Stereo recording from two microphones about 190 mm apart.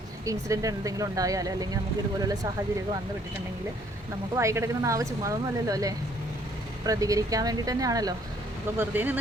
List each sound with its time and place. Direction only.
0.3 s a woman's voice: 15° right (ahead or behind)
4.4 s a woman's voice: 15° right (ahead or behind)